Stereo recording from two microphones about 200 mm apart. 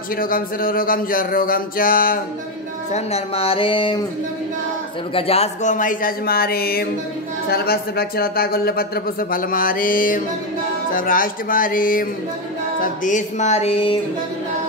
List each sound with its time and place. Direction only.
0.1 s speech: 45° left (ahead or behind)
2.9 s speech: 30° left (ahead or behind)
5.1 s speech: 30° left (ahead or behind)
12.8 s music: 40° left (ahead or behind)